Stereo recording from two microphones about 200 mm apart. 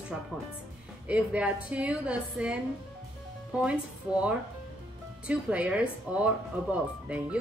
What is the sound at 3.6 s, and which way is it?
A woman's voice, 5° right (ahead or behind).